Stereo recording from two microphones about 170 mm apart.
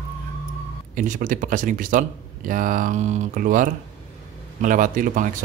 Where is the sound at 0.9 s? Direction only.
50° right (ahead or behind).